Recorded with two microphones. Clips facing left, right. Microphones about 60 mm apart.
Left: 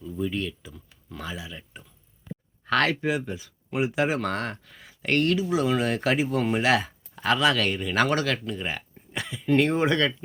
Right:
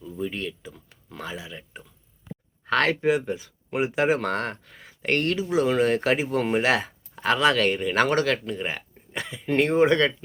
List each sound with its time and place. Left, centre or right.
0.0 s speech: right